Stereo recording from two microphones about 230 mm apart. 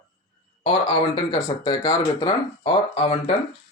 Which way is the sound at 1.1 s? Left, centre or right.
Left.